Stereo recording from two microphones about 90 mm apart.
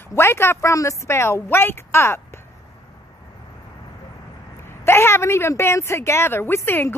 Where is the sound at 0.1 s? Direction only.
25° left (ahead or behind).